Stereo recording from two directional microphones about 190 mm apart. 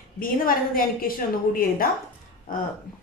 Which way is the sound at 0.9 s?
50° left (ahead or behind).